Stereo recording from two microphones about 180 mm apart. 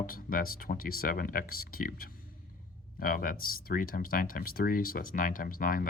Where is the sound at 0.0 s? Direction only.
50° left (ahead or behind).